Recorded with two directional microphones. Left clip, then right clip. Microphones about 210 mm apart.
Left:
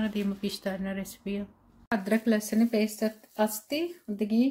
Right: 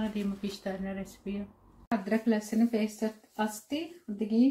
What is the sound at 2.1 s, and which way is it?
Speech, 55° left (ahead or behind).